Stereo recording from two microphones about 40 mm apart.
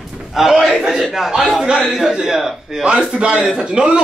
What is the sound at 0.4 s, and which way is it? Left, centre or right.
Speech, centre.